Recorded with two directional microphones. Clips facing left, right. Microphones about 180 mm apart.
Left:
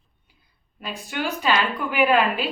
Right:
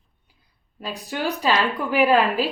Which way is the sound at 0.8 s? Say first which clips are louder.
Right 1 dB; 35° right (ahead or behind).